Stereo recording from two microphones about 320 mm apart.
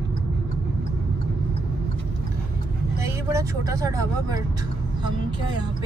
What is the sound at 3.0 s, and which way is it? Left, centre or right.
Speech, centre.